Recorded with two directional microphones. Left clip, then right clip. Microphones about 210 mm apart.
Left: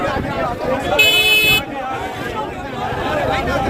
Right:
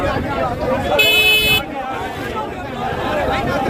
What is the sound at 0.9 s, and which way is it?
Vehicle, 10° right (ahead or behind).